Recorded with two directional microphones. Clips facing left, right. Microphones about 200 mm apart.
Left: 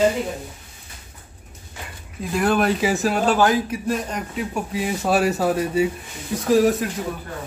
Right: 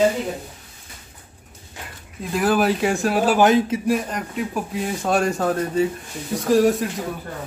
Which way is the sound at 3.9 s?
Centre (ahead or behind).